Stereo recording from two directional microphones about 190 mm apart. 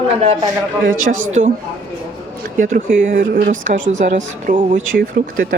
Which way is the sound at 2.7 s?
45° right (ahead or behind).